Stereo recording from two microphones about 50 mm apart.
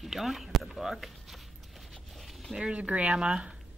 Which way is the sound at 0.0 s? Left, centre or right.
Centre.